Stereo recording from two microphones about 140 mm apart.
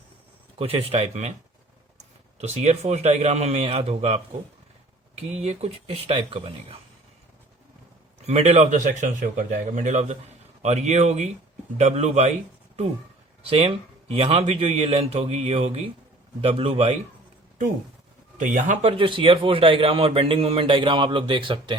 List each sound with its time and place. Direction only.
0.6 s a man's voice: 45° right (ahead or behind)
2.4 s a man's voice: 55° right (ahead or behind)
5.3 s a man's voice: 50° right (ahead or behind)
8.3 s a man's voice: 50° right (ahead or behind)
13.5 s a man's voice: 45° right (ahead or behind)
18.3 s a man's voice: 65° right (ahead or behind); by 21.8 s 35° right (ahead or behind)